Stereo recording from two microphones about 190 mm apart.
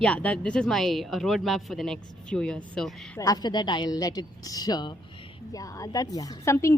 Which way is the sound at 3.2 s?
20° left (ahead or behind).